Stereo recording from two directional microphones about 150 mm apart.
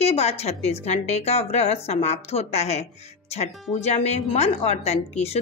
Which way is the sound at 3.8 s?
50° left (ahead or behind).